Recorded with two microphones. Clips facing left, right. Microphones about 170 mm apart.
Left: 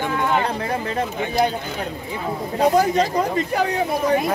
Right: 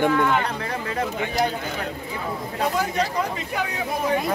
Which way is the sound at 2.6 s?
40° left (ahead or behind).